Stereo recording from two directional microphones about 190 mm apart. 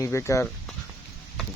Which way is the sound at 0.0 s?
15° left (ahead or behind).